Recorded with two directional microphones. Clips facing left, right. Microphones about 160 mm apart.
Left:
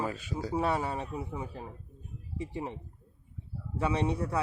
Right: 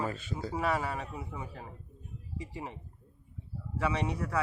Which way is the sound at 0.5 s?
25° left (ahead or behind).